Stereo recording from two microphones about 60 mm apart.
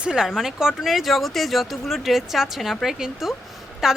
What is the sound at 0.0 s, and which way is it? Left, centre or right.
Speech, centre.